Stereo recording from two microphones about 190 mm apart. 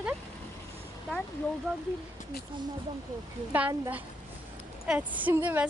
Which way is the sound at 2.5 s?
25° right (ahead or behind).